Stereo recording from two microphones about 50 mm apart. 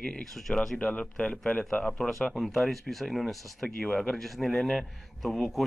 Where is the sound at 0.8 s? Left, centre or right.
Left.